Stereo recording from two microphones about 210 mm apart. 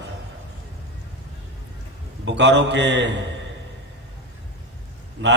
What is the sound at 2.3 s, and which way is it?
Speech, 55° right (ahead or behind).